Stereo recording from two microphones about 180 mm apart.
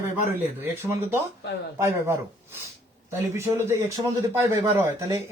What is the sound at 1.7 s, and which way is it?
Speech, 15° right (ahead or behind).